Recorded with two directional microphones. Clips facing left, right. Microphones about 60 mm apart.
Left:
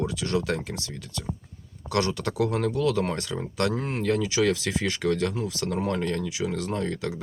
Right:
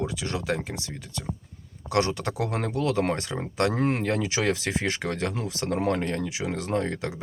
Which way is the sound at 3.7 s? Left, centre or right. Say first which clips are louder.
Right 5 dB; right.